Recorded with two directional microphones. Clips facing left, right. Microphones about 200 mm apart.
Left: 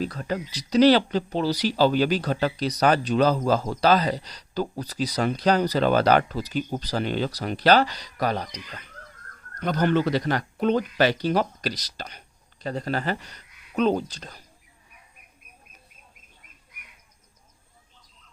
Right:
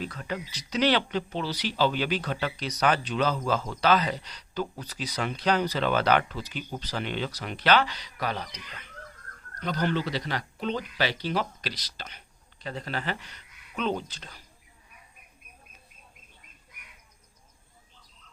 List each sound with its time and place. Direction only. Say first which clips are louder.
0.0 s speech: left 6 dB; 40° left (ahead or behind)